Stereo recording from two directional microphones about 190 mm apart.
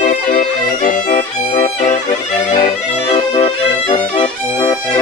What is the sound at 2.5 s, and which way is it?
Brass instrument, 30° left (ahead or behind).